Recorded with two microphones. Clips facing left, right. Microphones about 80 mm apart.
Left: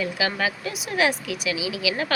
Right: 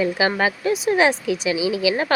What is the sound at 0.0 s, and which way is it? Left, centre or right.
Speech, right.